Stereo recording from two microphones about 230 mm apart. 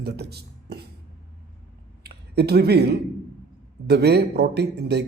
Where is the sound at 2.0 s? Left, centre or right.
Right.